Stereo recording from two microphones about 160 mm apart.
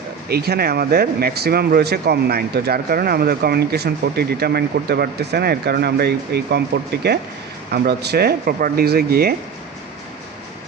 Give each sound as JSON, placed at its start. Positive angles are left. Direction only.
{"t": 0.3, "sound": "speech", "side_deg": -80}